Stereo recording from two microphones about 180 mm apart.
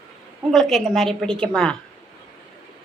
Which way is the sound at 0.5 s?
Centre (ahead or behind).